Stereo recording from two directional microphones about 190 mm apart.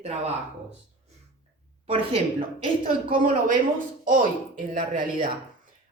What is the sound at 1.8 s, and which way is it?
Speech, 30° right (ahead or behind).